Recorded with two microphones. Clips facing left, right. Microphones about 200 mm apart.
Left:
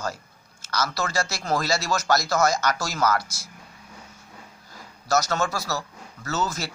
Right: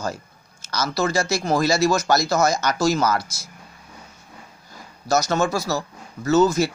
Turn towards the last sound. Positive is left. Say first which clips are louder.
# right 11 dB
turn(degrees=-15)  # may be behind; listen again after turning